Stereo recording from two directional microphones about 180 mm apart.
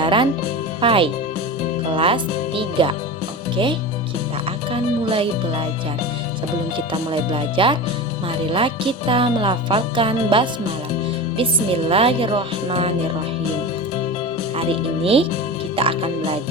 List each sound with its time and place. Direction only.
0.0 s music: 25° right (ahead or behind)
0.8 s speech: 30° right (ahead or behind)
4.7 s speech: 30° right (ahead or behind)
6.7 s speech: 30° right (ahead or behind)
14.5 s speech: 30° right (ahead or behind)
15.7 s music: 30° right (ahead or behind)